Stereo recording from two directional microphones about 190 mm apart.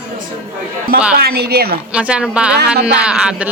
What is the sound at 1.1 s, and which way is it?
Speech, 55° right (ahead or behind).